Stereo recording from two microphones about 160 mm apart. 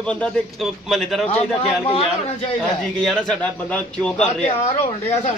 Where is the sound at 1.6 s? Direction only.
40° left (ahead or behind).